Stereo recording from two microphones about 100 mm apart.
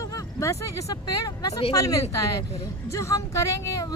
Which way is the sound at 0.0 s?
35° left (ahead or behind).